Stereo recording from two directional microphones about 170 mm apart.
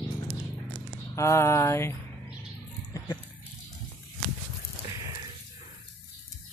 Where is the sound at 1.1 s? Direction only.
15° left (ahead or behind).